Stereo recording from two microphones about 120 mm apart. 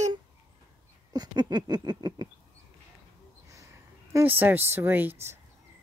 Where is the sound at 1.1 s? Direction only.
35° right (ahead or behind).